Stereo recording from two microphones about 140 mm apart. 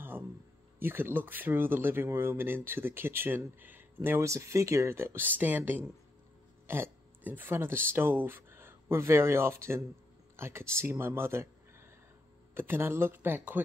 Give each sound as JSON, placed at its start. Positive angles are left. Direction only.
{"t": 0.7, "sound": "speech", "side_deg": -15}
{"t": 12.5, "sound": "speech", "side_deg": -15}